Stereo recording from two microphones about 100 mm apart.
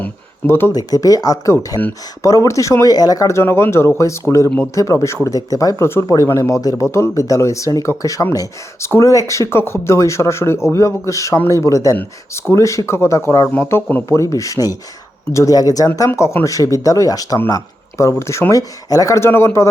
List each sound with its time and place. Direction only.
0.0 s a sound: 25° left (ahead or behind)
0.7 s speech: 40° left (ahead or behind); by 14.2 s 20° left (ahead or behind)
14.2 s speech: 35° left (ahead or behind)
16.0 s speech: 25° left (ahead or behind)